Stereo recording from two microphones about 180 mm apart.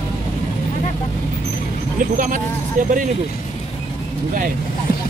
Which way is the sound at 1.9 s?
45° right (ahead or behind).